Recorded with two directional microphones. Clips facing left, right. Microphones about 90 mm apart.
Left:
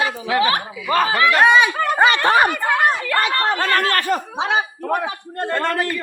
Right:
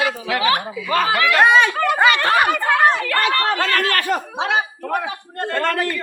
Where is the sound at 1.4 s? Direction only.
Centre (ahead or behind).